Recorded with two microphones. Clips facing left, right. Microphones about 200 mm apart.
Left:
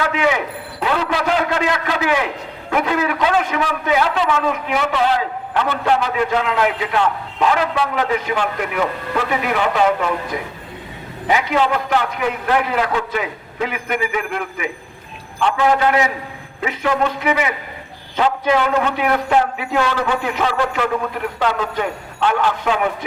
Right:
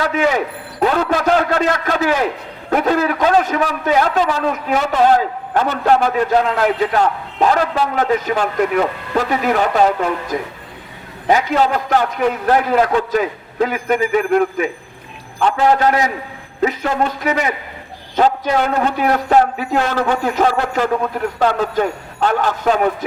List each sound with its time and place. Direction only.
0.2 s a man's voice: 40° right (ahead or behind)
11.3 s a man's voice: 40° right (ahead or behind)